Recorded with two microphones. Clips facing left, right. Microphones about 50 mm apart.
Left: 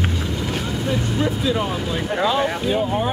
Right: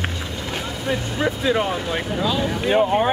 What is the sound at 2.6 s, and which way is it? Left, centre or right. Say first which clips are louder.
Speech: right 3 dB; right.